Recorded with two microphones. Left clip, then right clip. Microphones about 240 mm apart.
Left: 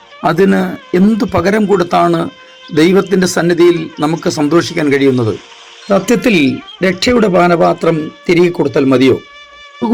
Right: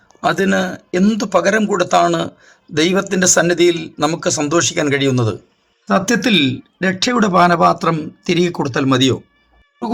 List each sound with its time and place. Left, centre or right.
0.2 s a man's voice: centre
6.2 s speech: right
6.8 s a man's voice: centre